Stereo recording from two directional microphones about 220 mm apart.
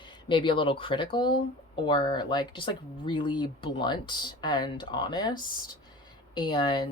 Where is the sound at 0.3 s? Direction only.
20° left (ahead or behind).